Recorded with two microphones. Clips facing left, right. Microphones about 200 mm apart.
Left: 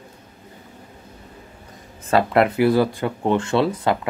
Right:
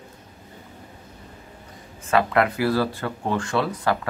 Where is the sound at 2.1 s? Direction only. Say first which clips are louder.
Left 3 dB; 30° left (ahead or behind).